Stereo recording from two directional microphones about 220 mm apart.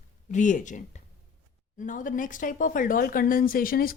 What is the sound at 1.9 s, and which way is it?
Speech, 35° left (ahead or behind).